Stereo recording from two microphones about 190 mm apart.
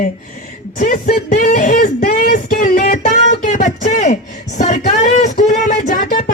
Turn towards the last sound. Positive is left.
turn(degrees=45)  # may be behind; listen again after turning